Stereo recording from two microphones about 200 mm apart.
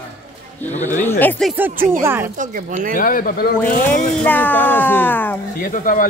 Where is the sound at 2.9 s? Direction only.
45° left (ahead or behind).